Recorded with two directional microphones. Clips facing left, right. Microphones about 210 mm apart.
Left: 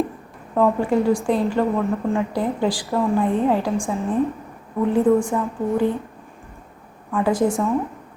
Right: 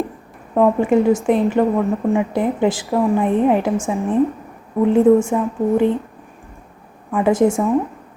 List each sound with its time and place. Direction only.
0.5 s a woman's voice: 20° right (ahead or behind)
7.1 s a woman's voice: 20° right (ahead or behind)